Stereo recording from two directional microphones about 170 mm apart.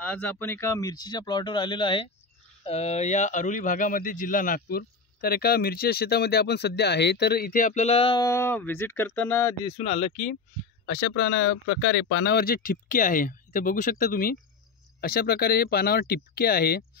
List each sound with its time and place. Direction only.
0.0 s speech: 10° left (ahead or behind); by 8.3 s 30° left (ahead or behind)
8.3 s speech: 15° left (ahead or behind)
9.8 s speech: 40° left (ahead or behind)
10.9 s speech: 75° left (ahead or behind); by 14.4 s 55° left (ahead or behind)
15.0 s speech: 65° left (ahead or behind)